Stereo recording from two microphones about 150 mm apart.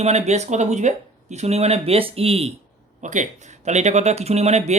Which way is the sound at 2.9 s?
55° right (ahead or behind).